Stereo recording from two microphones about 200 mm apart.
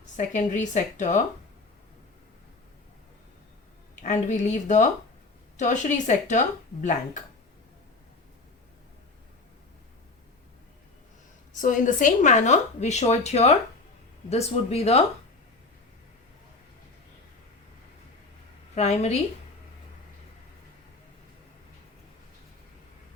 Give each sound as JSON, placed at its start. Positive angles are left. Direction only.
{"t": 0.2, "sound": "a woman's voice", "side_deg": 40}
{"t": 4.0, "sound": "a woman's voice", "side_deg": 40}
{"t": 11.6, "sound": "a woman's voice", "side_deg": 40}
{"t": 18.7, "sound": "a woman's voice", "side_deg": 35}